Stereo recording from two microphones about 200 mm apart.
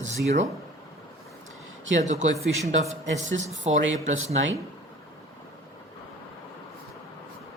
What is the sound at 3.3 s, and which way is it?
Speech, 35° right (ahead or behind).